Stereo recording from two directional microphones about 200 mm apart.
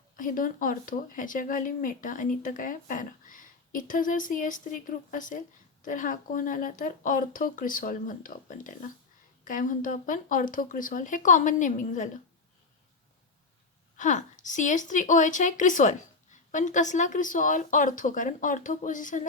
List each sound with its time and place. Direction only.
0.2 s a woman's voice: 40° left (ahead or behind)
13.9 s a woman's voice: 40° left (ahead or behind)